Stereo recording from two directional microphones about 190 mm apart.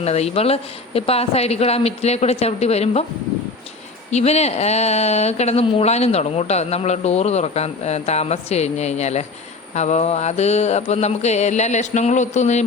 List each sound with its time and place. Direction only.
0.0 s speech: 35° left (ahead or behind)
4.1 s speech: 35° left (ahead or behind)